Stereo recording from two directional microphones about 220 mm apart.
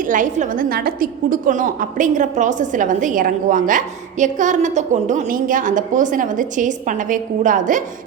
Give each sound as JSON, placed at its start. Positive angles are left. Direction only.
{"t": 0.0, "sound": "a woman's voice", "side_deg": -35}